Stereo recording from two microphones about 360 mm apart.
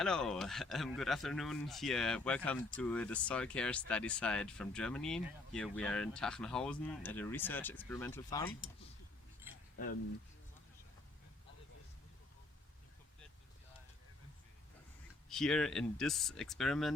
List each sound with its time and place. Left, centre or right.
0.0 s speech: centre
15.3 s speech: centre